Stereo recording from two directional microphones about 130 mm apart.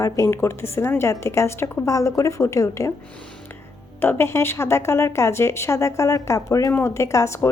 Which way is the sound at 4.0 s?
15° left (ahead or behind).